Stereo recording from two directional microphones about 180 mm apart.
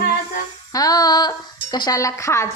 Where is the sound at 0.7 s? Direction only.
20° left (ahead or behind).